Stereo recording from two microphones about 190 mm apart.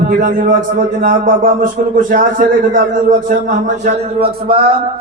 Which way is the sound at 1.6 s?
45° right (ahead or behind).